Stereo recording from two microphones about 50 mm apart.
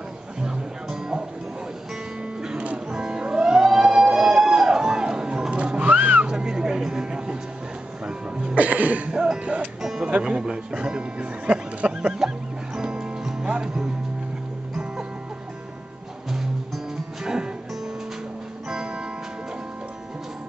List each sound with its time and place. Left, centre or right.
0.4 s music: centre
2.5 s music: right
2.9 s music: centre; by 6.2 s right
6.2 s dog: centre
8.0 s music: centre
8.5 s cough: right
9.1 s music: centre
9.8 s music: centre
10.0 s music: right
16.3 s music: centre
18.7 s music: centre